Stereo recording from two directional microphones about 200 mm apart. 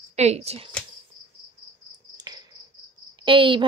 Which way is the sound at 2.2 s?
20° right (ahead or behind).